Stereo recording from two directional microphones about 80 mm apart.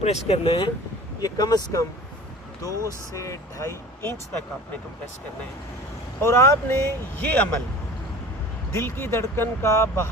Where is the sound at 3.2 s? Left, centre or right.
Left.